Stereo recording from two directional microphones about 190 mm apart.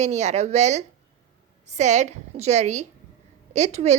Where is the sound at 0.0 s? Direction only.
35° right (ahead or behind).